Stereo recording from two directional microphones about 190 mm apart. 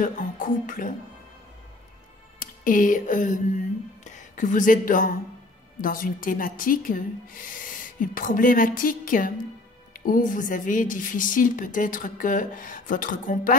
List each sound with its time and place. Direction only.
0.0 s speech: 45° left (ahead or behind)
2.3 s speech: 45° left (ahead or behind)